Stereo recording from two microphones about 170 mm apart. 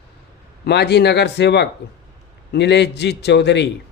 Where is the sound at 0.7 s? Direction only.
80° left.